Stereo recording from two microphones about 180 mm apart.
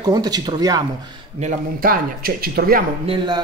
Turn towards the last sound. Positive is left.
turn(degrees=-25)  # may be behind; listen again after turning